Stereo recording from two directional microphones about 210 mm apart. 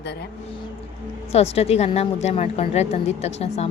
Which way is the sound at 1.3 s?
30° left (ahead or behind).